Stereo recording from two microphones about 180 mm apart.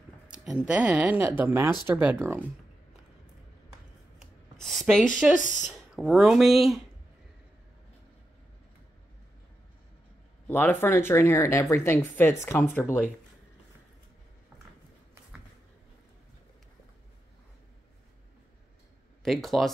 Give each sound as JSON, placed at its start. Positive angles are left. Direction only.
{"t": 0.3, "sound": "speech", "side_deg": -5}
{"t": 4.6, "sound": "a sound", "side_deg": 0}
{"t": 5.4, "sound": "speech", "side_deg": 45}
{"t": 5.7, "sound": "speech", "side_deg": 0}
{"t": 10.4, "sound": "speech", "side_deg": 10}
{"t": 19.2, "sound": "speech", "side_deg": 0}